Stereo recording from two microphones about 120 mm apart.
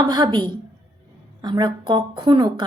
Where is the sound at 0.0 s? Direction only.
35° right (ahead or behind).